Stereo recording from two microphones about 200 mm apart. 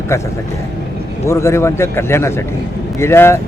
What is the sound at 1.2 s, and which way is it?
Speech, 15° left (ahead or behind).